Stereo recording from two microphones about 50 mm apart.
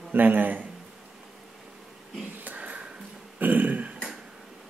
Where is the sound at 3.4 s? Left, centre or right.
Right.